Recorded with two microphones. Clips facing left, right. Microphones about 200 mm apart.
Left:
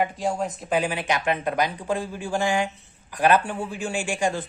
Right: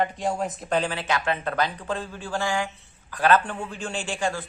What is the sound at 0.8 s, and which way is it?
A man's voice, 15° left (ahead or behind).